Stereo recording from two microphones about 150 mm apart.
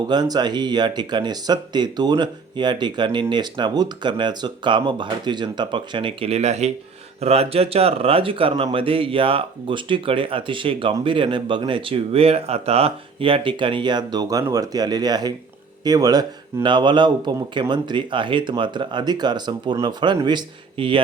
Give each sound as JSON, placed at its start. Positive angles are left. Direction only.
{"t": 0.1, "sound": "speech", "side_deg": -30}